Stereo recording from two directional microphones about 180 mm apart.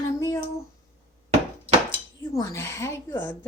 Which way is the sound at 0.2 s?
15° left (ahead or behind).